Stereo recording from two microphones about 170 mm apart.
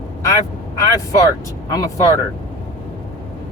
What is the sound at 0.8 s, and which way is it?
Speech, 20° left (ahead or behind).